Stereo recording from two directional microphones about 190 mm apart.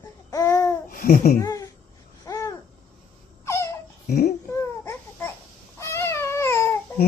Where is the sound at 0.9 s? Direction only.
45° left (ahead or behind).